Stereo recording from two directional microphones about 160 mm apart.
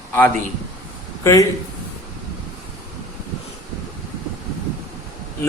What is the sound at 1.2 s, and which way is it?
Speech, 20° left (ahead or behind).